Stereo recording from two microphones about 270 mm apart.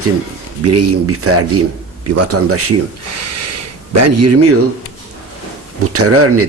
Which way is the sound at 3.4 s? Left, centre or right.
Right.